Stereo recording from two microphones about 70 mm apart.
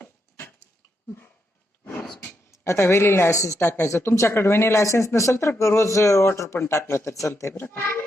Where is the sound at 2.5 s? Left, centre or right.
Left.